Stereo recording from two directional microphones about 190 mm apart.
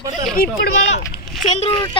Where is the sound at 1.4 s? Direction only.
35° left (ahead or behind).